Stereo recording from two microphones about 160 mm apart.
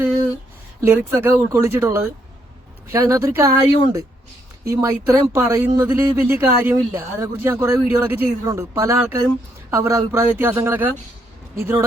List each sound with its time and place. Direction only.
0.8 s a man's voice: 15° right (ahead or behind)